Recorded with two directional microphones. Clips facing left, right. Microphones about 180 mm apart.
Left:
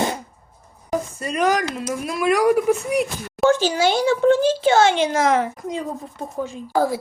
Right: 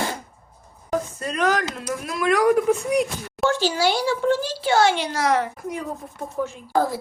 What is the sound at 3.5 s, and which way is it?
Speech, 20° left (ahead or behind).